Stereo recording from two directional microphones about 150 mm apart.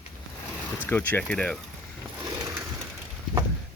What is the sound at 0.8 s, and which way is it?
Speech, 15° left (ahead or behind).